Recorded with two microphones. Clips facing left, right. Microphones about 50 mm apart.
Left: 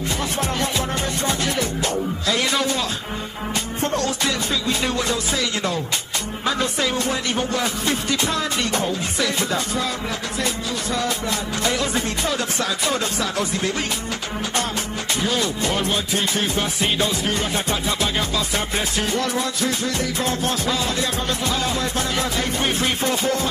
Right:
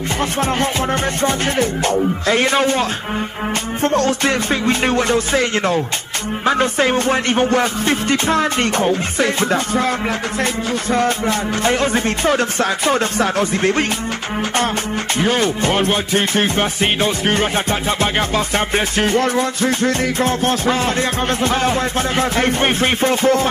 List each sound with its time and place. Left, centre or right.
1.2 s speech: right
3.8 s music: right
15.1 s music: right